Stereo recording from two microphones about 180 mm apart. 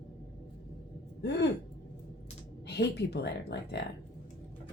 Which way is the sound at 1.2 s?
70° left (ahead or behind).